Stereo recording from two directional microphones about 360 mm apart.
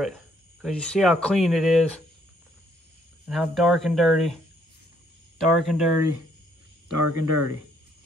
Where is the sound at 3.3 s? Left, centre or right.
Centre.